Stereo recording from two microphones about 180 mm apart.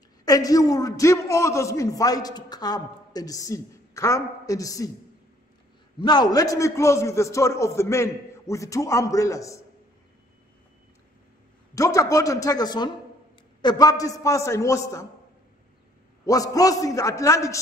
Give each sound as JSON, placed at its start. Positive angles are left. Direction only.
{"t": 0.2, "sound": "a man's voice", "side_deg": 20}
{"t": 5.9, "sound": "a man's voice", "side_deg": 25}
{"t": 11.7, "sound": "a man's voice", "side_deg": 20}
{"t": 16.3, "sound": "a man's voice", "side_deg": 20}